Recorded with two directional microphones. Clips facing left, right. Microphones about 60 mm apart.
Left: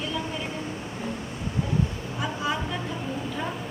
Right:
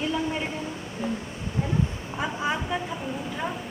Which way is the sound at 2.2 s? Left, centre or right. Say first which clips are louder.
Right 1 dB; right.